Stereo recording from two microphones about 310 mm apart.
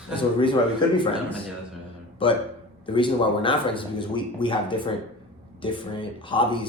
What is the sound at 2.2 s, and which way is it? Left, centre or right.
Speech, centre.